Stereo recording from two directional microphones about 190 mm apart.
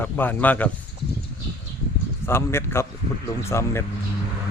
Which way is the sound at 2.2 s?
15° left (ahead or behind).